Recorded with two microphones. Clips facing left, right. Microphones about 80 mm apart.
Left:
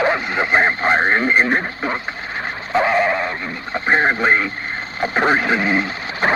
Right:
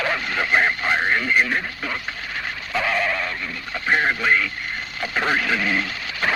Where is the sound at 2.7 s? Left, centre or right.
Left.